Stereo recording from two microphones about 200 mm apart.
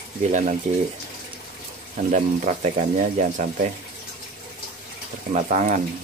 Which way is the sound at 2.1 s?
35° right (ahead or behind).